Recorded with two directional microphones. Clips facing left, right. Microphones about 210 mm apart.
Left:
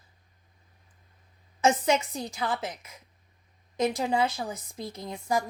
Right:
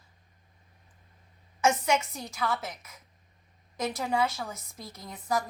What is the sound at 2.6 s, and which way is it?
A woman's voice, 30° left (ahead or behind).